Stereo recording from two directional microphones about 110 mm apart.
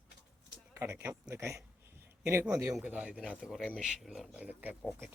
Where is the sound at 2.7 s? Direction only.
10° right (ahead or behind).